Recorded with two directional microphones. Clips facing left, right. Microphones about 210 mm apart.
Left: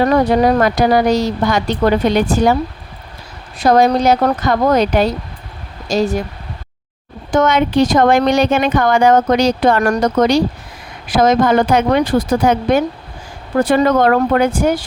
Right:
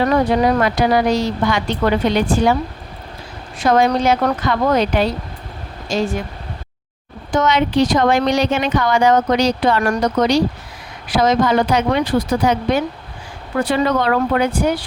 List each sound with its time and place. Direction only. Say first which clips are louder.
0.0 s speech: left 3 dB; 40° left (ahead or behind)
3.6 s speech: left 3 dB; 35° left (ahead or behind)
7.3 s speech: left 3 dB; 50° left (ahead or behind)